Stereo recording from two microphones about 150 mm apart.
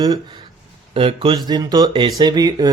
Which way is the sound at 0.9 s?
35° right (ahead or behind).